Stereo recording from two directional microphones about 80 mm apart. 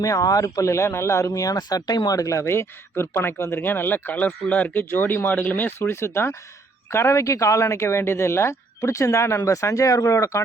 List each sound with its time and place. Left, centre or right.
0.0 s speech: left
1.3 s speech: left